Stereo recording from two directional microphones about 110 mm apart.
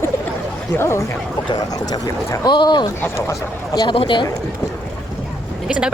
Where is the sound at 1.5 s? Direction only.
40° left (ahead or behind).